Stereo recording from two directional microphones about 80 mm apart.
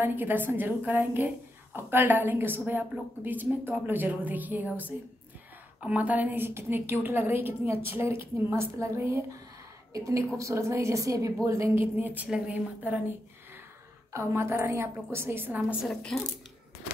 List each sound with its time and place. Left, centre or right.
0.0 s a woman's voice: right
11.8 s a woman's voice: right
14.1 s a woman's voice: right
15.9 s speech: centre